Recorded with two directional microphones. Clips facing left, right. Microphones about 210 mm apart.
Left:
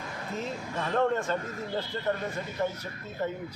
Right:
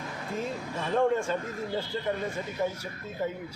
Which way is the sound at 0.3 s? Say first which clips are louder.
Right 1 dB; 10° right (ahead or behind).